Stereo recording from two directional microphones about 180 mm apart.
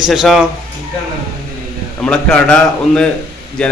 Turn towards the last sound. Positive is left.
turn(degrees=5)  # may be behind; listen again after turning